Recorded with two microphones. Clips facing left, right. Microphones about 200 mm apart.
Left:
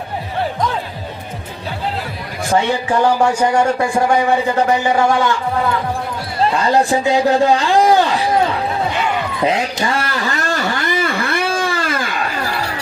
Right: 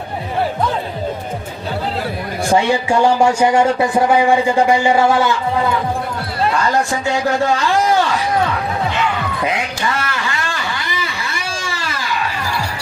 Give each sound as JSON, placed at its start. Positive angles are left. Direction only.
{"t": 2.5, "sound": "a man's voice", "side_deg": -10}
{"t": 6.7, "sound": "speech", "side_deg": 30}
{"t": 8.0, "sound": "a sound", "side_deg": 30}